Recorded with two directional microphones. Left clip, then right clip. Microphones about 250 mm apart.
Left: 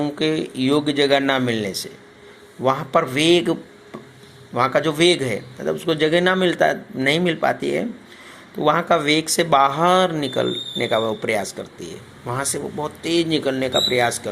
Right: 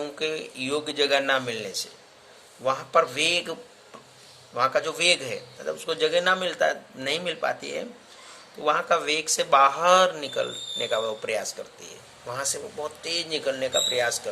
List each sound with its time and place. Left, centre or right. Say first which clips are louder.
0.0 s speech: left 8 dB; centre